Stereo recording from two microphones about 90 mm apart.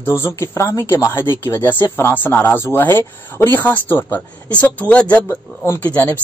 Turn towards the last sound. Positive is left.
turn(degrees=15)  # may be behind; listen again after turning